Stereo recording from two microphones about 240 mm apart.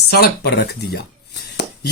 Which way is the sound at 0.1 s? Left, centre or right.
Left.